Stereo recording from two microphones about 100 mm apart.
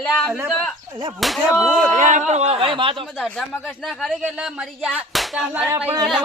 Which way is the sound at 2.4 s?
80° right.